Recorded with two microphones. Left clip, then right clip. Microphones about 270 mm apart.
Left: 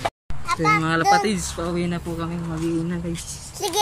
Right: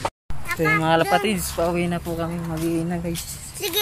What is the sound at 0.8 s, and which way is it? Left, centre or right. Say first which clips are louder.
Speech: even; centre.